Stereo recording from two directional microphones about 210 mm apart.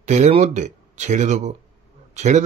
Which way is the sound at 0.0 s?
35° right (ahead or behind).